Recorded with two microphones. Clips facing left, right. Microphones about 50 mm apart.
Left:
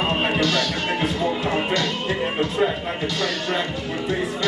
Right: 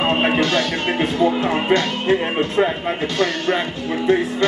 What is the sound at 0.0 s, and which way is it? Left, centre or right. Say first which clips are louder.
Music: right 4 dB; right.